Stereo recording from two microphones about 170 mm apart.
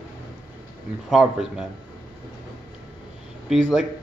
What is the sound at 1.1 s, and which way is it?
Speech, 5° right (ahead or behind).